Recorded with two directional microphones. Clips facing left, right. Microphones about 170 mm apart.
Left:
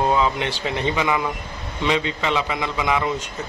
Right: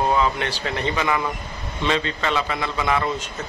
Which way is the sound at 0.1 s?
15° left (ahead or behind).